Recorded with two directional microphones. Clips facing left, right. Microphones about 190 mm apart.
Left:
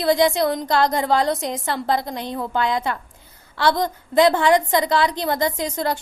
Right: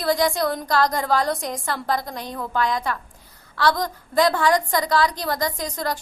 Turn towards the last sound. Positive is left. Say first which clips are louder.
# left 4 dB
turn(degrees=25)  # may be behind; listen again after turning